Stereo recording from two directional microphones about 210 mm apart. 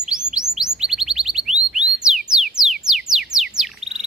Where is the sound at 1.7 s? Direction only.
Centre (ahead or behind).